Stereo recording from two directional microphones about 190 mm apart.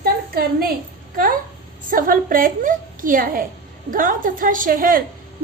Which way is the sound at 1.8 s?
45° right (ahead or behind).